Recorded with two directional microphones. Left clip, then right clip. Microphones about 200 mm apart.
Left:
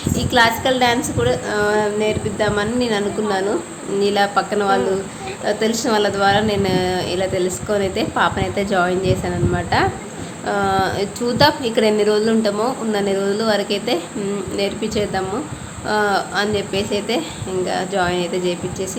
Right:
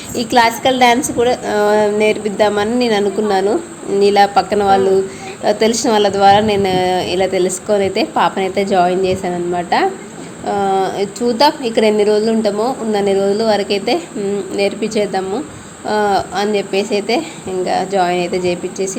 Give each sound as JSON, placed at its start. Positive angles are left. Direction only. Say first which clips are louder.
{"t": 0.2, "sound": "a woman's voice", "louder": "right 3 dB", "side_deg": -30}